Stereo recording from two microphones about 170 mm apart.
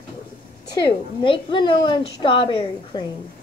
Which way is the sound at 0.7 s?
25° left (ahead or behind).